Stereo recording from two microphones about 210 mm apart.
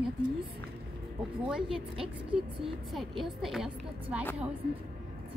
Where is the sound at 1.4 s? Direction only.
5° right (ahead or behind).